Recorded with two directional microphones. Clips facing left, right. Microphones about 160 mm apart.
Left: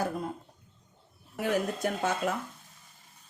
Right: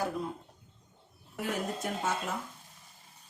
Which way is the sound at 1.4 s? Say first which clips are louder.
Left 5 dB; 70° left (ahead or behind).